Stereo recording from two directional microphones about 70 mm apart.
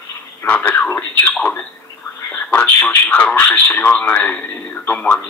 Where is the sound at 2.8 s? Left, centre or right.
Left.